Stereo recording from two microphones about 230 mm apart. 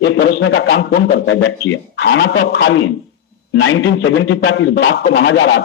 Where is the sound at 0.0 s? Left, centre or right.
Left.